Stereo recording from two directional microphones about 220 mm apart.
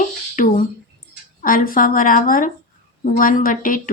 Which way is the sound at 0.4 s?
35° left (ahead or behind).